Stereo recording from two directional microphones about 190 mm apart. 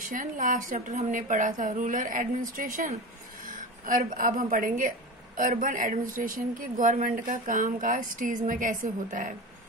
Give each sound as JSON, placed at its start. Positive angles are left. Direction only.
{"t": 0.0, "sound": "a woman's voice", "side_deg": -45}